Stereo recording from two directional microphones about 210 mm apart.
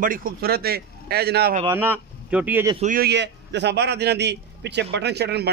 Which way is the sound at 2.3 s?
5° right (ahead or behind).